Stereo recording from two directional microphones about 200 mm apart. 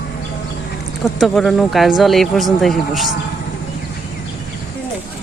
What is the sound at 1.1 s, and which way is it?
Speech, centre (ahead or behind).